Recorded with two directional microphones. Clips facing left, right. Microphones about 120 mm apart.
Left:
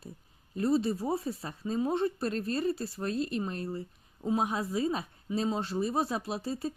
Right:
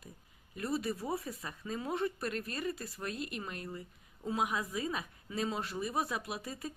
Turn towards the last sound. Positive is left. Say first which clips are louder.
# left 7 dB
turn(degrees=30)  # may be behind; listen again after turning